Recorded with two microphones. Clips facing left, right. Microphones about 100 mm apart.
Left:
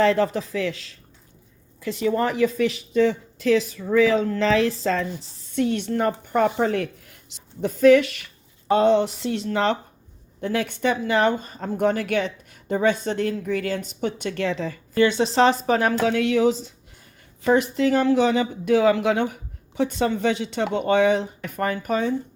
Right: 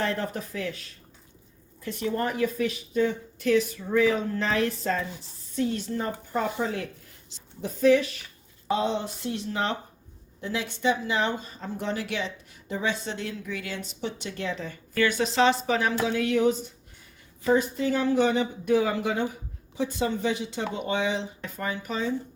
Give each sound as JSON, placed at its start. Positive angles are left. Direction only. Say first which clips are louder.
{"t": 0.0, "sound": "speech", "louder": "left 10 dB", "side_deg": 90}
{"t": 8.7, "sound": "speech", "louder": "left 9 dB", "side_deg": 65}
{"t": 10.4, "sound": "speech", "louder": "left 4 dB", "side_deg": 55}
{"t": 14.9, "sound": "a woman's voice", "louder": "left 5 dB", "side_deg": 25}
{"t": 16.0, "sound": "speech", "louder": "left 3 dB", "side_deg": 85}